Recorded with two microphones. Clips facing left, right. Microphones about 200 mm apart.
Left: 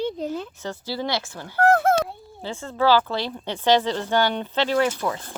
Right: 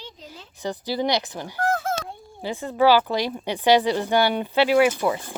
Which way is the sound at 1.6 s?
60° left (ahead or behind).